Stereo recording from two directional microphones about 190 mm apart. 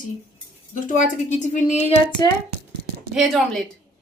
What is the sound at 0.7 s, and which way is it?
A woman's voice, 40° left (ahead or behind).